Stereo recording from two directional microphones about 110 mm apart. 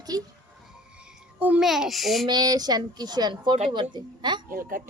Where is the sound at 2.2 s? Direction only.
40° right (ahead or behind).